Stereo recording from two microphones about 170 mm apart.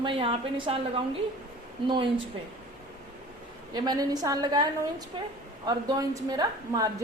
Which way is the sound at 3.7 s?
25° right (ahead or behind).